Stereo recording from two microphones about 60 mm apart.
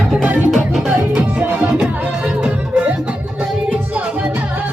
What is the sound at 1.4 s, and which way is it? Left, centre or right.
Music, right.